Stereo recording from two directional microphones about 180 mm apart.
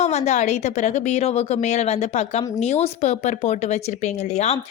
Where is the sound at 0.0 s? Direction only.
40° left (ahead or behind).